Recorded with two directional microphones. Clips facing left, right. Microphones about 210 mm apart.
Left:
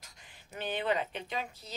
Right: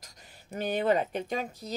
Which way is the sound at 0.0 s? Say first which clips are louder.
Right 4 dB; 40° right (ahead or behind).